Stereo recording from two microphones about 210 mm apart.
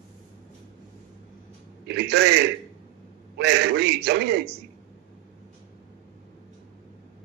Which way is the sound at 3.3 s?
50° right (ahead or behind).